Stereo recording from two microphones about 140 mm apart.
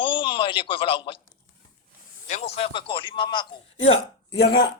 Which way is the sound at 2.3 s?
50° left (ahead or behind).